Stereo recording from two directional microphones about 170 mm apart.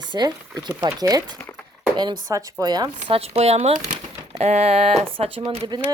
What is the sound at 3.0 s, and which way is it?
Speech, 35° right (ahead or behind).